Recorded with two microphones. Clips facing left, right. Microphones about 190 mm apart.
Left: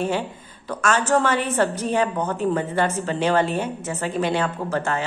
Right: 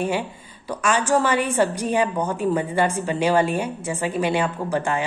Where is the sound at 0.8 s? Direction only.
10° right (ahead or behind).